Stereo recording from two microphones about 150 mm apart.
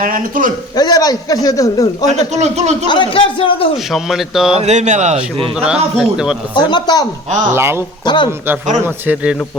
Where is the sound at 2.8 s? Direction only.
30° left (ahead or behind).